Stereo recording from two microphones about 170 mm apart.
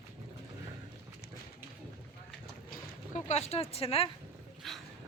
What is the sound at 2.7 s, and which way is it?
Boat, 45° left (ahead or behind).